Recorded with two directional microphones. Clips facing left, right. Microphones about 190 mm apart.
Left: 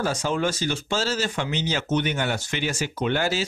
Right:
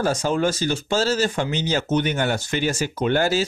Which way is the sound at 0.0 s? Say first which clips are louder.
Right 4 dB; 45° right (ahead or behind).